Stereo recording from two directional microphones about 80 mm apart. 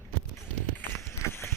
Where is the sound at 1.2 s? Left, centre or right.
Left.